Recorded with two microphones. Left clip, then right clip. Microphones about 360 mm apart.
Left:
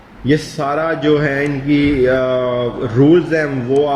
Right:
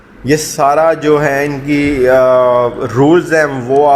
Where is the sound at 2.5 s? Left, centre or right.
Right.